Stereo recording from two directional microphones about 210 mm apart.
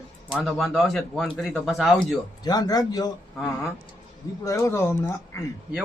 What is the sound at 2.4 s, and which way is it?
Speech, 20° left (ahead or behind).